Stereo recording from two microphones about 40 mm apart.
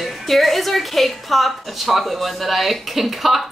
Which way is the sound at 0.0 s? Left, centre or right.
Centre.